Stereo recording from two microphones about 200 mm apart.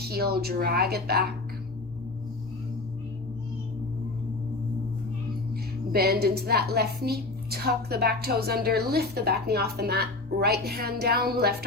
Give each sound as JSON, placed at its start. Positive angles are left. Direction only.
{"t": 0.0, "sound": "a woman's voice", "side_deg": -50}
{"t": 5.9, "sound": "a woman's voice", "side_deg": -50}